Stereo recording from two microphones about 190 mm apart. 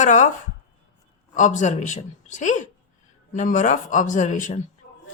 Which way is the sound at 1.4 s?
40° left (ahead or behind).